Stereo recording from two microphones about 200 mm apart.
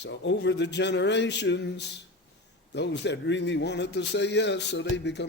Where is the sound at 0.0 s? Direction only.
60° left (ahead or behind).